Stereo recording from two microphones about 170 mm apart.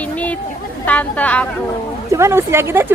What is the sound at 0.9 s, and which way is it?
Speech, 10° left (ahead or behind).